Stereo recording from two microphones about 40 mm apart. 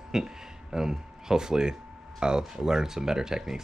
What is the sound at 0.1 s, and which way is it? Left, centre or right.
Speech, centre.